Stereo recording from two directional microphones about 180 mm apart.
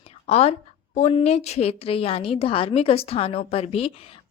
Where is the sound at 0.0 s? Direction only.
35° left (ahead or behind).